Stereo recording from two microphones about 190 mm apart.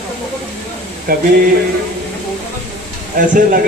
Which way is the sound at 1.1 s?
50° right (ahead or behind).